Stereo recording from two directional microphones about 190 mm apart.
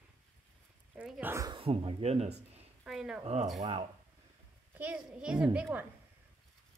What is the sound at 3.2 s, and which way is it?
Speech, 35° right (ahead or behind).